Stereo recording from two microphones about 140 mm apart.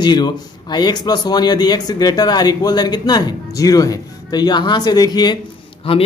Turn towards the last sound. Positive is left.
turn(degrees=40)  # may be behind; listen again after turning